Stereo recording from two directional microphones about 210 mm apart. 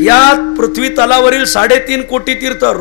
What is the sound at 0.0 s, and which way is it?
Music, 15° left (ahead or behind).